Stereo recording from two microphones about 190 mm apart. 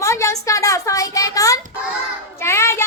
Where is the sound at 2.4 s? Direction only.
15° left (ahead or behind).